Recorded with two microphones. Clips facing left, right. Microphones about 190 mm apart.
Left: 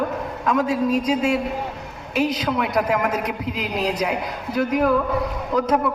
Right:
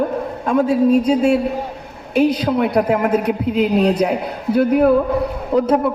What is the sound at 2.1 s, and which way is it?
Speech, 55° right (ahead or behind).